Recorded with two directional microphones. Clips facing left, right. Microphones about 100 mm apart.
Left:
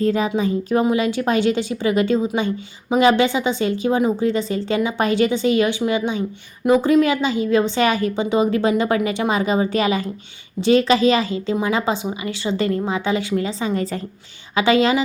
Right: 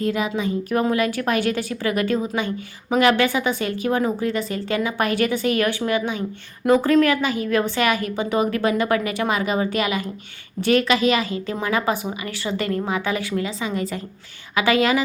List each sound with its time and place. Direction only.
0.0 s a woman's voice: 35° left (ahead or behind)
0.8 s a woman's voice: 20° left (ahead or behind)